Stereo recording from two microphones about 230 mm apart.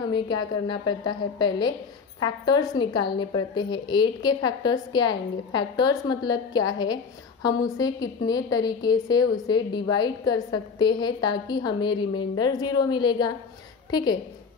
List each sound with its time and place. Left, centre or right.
0.7 s a woman's voice: centre